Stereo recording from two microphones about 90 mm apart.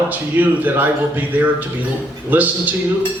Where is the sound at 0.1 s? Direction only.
20° right (ahead or behind).